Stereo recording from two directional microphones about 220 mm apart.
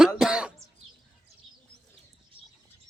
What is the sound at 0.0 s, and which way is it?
Cough, 5° right (ahead or behind).